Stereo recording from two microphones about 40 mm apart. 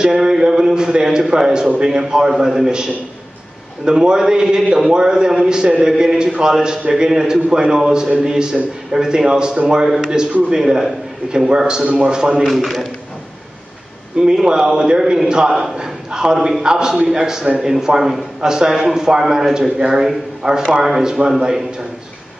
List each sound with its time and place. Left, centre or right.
0.0 s a man's voice: centre
12.4 s a man's voice: centre
14.4 s a man's voice: centre